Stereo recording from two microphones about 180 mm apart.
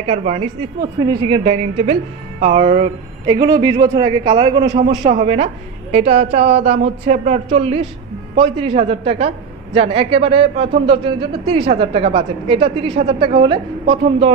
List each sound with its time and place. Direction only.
0.0 s a man's voice: 35° right (ahead or behind)
0.7 s a man's voice: 20° right (ahead or behind)
3.3 s a man's voice: 20° right (ahead or behind)
4.7 s a man's voice: 40° right (ahead or behind)